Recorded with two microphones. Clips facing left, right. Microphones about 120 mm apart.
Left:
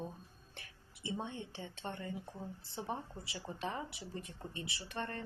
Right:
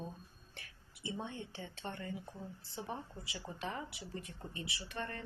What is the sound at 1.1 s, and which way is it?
Speech, 25° left (ahead or behind).